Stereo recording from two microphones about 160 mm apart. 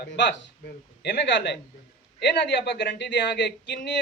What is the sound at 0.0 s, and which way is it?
Speech, 90° left.